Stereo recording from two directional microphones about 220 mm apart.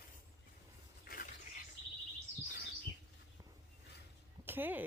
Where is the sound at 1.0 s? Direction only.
45° left (ahead or behind).